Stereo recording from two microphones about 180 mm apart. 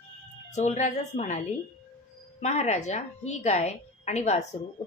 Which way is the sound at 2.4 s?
40° left (ahead or behind).